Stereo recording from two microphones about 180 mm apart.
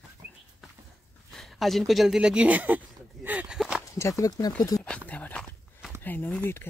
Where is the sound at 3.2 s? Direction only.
10° right (ahead or behind).